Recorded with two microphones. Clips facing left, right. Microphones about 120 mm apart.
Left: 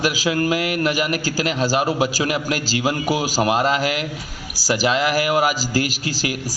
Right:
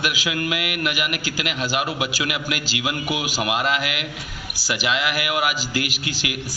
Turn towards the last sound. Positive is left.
turn(degrees=35)  # may be behind; listen again after turning